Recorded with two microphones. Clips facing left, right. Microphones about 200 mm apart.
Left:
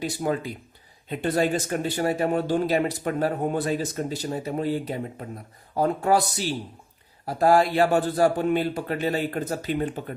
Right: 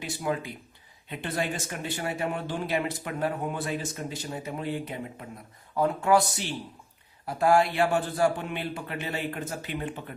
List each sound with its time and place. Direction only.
0.0 s speech: 40° left (ahead or behind)